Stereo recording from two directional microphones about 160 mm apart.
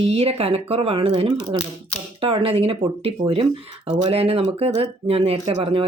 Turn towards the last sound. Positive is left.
turn(degrees=-35)  # may be behind; listen again after turning